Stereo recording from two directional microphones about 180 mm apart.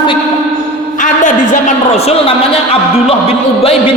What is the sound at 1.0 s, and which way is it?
A man's voice, 45° left (ahead or behind).